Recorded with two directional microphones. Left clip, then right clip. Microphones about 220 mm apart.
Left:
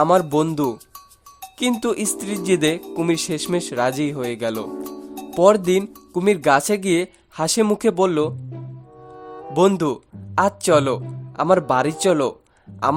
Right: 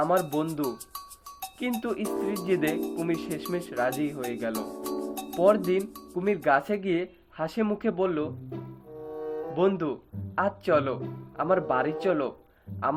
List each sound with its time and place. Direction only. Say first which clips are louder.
0.0 s speech: left 9 dB; 45° left (ahead or behind)
2.0 s speech: left 2 dB; centre (ahead or behind)
2.4 s speech: left 11 dB; 45° left (ahead or behind)
4.7 s music: left 1 dB; centre (ahead or behind)
5.3 s speech: left 8 dB; 50° left (ahead or behind)
9.1 s music: right 1 dB; centre (ahead or behind)
9.6 s speech: left 9 dB; 50° left (ahead or behind)